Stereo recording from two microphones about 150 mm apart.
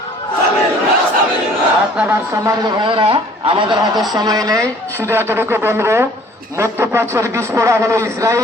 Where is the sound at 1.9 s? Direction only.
10° right (ahead or behind).